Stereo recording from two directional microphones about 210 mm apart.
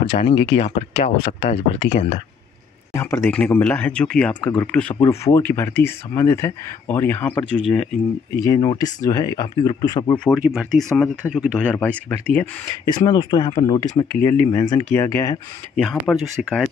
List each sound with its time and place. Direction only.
0.0 s speech: 25° left (ahead or behind)
2.9 s speech: 15° left (ahead or behind)
8.4 s speech: 20° left (ahead or behind)
10.2 s speech: 5° right (ahead or behind)
12.8 s speech: 20° left (ahead or behind)
15.7 s speech: centre (ahead or behind)